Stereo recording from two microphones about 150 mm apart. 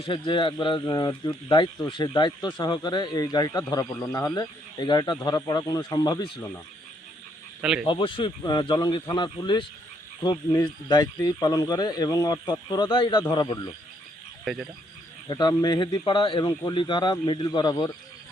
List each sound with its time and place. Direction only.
0.0 s speech: 30° left (ahead or behind)
7.6 s speech: 5° right (ahead or behind)
7.9 s speech: 35° left (ahead or behind)
14.4 s speech: centre (ahead or behind)
15.3 s speech: 30° left (ahead or behind)